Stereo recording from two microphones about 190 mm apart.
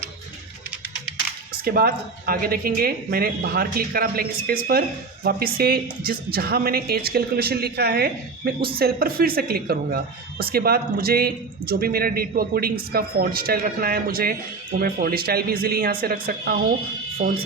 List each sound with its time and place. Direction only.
1.6 s speech: 50° right (ahead or behind)